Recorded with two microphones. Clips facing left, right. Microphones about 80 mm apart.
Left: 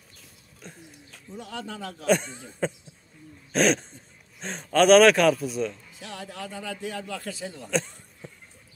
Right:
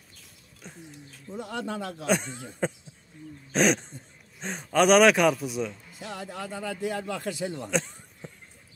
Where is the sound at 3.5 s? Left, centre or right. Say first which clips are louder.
Left 1 dB; centre.